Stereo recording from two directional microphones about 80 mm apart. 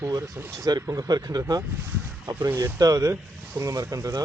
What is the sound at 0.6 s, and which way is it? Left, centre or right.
Speech, right.